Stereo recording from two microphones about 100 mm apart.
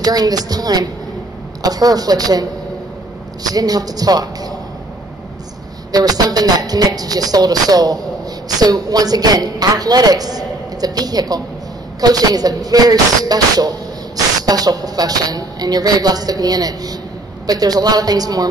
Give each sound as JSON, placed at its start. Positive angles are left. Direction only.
{"t": 0.0, "sound": "speech", "side_deg": -40}
{"t": 3.5, "sound": "speech", "side_deg": -40}
{"t": 5.9, "sound": "speech", "side_deg": -40}